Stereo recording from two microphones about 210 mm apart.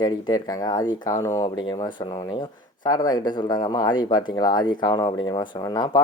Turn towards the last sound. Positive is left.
turn(degrees=20)  # may be behind; listen again after turning